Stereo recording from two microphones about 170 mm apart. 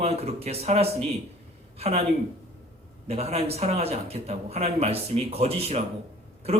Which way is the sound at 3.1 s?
35° right (ahead or behind).